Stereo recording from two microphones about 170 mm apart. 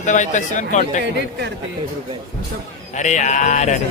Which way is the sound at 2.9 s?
45° left (ahead or behind).